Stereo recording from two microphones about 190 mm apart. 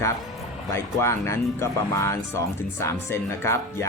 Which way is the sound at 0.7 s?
15° left (ahead or behind).